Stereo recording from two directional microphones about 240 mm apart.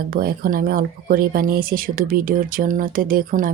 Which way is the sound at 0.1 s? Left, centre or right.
Right.